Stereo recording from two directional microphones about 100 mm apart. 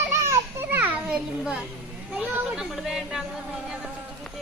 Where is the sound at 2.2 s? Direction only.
15° right (ahead or behind).